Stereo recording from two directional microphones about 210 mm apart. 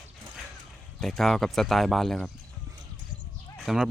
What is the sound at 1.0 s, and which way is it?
Speech, centre (ahead or behind).